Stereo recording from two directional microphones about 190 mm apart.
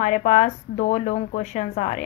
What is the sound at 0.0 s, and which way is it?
A woman's voice, 40° left (ahead or behind).